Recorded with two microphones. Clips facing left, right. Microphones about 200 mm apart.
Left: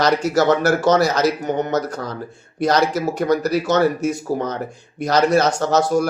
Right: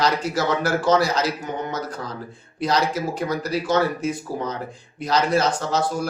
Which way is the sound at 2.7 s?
45° left (ahead or behind).